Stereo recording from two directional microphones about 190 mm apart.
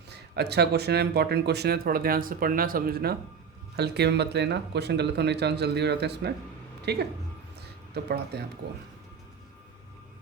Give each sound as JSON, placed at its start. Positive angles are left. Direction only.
{"t": 0.1, "sound": "speech", "side_deg": -60}